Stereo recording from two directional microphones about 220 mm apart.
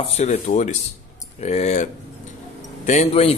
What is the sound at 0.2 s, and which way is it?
Speech, 30° left (ahead or behind).